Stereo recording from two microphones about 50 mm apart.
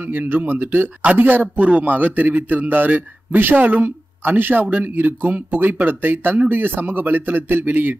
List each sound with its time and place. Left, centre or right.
0.0 s speech: right